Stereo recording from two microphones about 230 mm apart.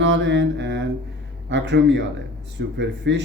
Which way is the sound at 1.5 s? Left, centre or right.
Right.